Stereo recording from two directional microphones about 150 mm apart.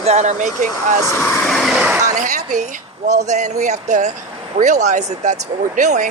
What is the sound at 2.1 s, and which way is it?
Speech, 55° right (ahead or behind).